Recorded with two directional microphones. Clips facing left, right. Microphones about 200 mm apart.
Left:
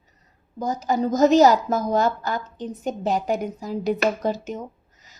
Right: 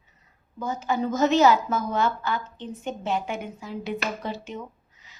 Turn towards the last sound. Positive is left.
turn(degrees=40)  # may be behind; listen again after turning